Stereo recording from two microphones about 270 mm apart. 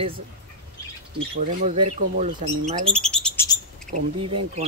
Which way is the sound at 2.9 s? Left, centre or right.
Centre.